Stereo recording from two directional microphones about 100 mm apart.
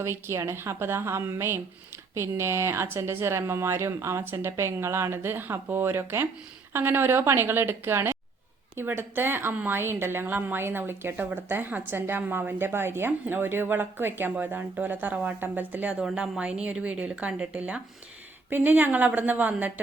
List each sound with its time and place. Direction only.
0.0 s a woman's voice: 25° right (ahead or behind)